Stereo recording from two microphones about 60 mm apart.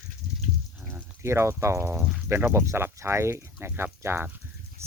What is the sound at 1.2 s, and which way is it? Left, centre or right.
Speech, right.